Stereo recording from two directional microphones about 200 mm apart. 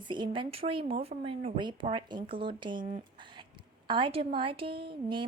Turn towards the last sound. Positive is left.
turn(degrees=-25)  # may be behind; listen again after turning